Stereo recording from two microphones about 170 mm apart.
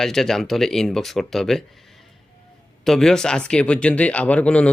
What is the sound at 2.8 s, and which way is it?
Speech, 5° left (ahead or behind).